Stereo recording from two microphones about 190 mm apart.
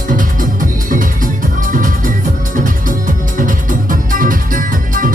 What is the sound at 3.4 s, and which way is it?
Music, 45° right (ahead or behind).